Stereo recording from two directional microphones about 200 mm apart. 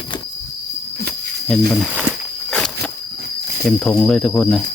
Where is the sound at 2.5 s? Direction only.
5° left (ahead or behind).